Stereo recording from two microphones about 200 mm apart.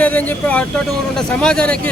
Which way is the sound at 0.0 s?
5° left (ahead or behind).